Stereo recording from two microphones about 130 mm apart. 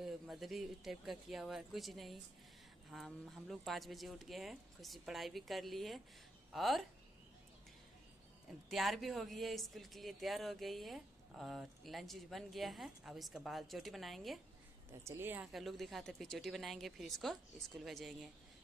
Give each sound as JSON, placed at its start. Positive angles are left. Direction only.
{"t": 0.0, "sound": "speech", "side_deg": 0}
{"t": 8.6, "sound": "speech", "side_deg": 0}
{"t": 14.9, "sound": "a woman's voice", "side_deg": -20}
{"t": 15.4, "sound": "speech", "side_deg": 0}